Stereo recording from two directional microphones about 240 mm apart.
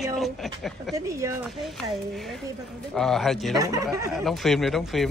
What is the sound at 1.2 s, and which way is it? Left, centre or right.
Speech, centre.